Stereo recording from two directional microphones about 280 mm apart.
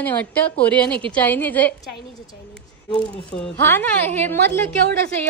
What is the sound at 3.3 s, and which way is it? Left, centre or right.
A woman's voice, centre.